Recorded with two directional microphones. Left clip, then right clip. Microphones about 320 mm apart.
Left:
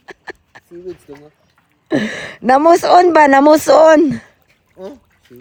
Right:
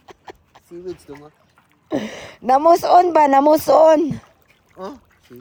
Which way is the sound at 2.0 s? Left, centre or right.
Left.